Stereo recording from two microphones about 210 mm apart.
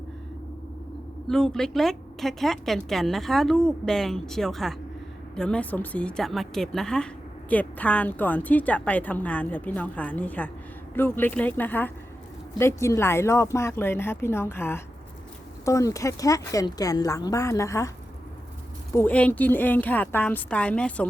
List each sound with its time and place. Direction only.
1.3 s a woman's voice: 5° left (ahead or behind)
18.9 s a woman's voice: 5° left (ahead or behind)